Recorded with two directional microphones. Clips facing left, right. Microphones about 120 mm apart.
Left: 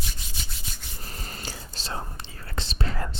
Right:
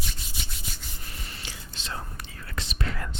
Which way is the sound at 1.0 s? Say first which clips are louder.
Left 6 dB; 40° left (ahead or behind).